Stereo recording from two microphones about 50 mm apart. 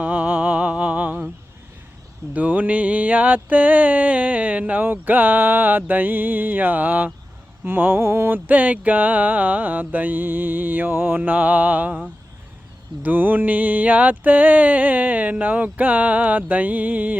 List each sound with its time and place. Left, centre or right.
0.0 s music: right
2.3 s music: right
7.6 s speech: right
8.4 s music: right
11.2 s music: right
13.0 s music: right